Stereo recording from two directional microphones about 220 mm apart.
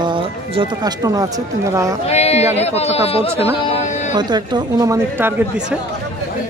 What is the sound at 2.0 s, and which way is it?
Speech, 30° left (ahead or behind).